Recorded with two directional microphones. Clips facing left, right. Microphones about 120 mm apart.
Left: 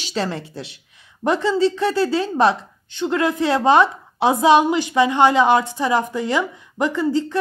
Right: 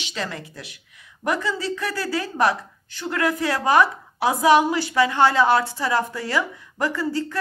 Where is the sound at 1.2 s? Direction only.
25° left (ahead or behind).